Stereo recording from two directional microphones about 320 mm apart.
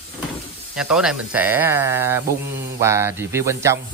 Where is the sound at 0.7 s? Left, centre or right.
Centre.